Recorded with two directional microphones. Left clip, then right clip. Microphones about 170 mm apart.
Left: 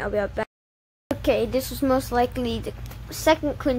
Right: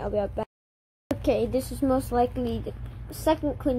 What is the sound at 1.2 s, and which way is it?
A woman's voice, 15° right (ahead or behind).